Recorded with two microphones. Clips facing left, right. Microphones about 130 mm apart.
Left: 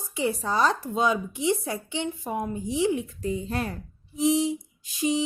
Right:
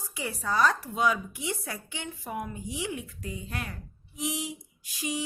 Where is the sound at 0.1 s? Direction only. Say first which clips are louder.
Left 6 dB; 25° left (ahead or behind).